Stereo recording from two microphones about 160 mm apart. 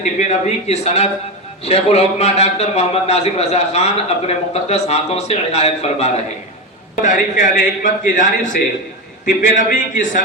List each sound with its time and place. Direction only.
0.0 s a man's voice: 45° left (ahead or behind)
7.0 s a man's voice: 55° left (ahead or behind)
9.6 s a man's voice: 55° left (ahead or behind)